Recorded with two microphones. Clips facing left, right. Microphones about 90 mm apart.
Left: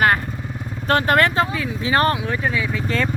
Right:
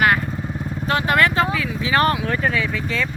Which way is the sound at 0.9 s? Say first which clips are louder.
Left 2 dB; 45° left (ahead or behind).